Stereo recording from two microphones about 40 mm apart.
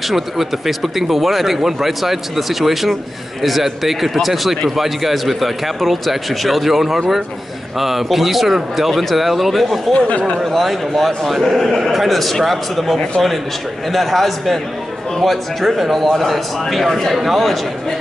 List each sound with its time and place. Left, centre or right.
0.1 s speech: centre
9.9 s speech: left
10.4 s speech: centre